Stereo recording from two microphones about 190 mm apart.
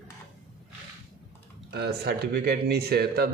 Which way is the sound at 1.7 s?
55° right (ahead or behind).